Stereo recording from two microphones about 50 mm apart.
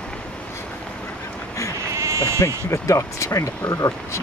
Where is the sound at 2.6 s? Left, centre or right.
Left.